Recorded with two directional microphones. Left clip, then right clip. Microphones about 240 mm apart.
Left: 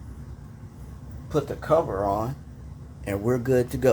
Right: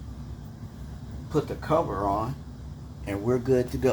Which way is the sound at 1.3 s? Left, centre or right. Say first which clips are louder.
Left 3 dB; left.